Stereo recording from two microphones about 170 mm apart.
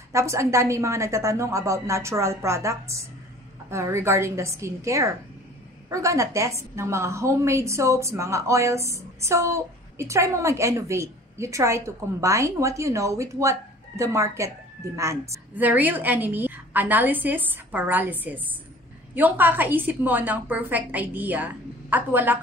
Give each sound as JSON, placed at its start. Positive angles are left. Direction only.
{"t": 0.1, "sound": "a woman's voice", "side_deg": -15}